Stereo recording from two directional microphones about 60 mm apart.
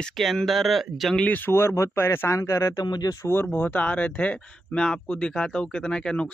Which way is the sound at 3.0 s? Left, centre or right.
Left.